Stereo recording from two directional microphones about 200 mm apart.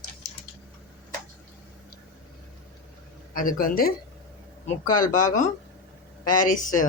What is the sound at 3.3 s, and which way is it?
Speech, 45° left (ahead or behind).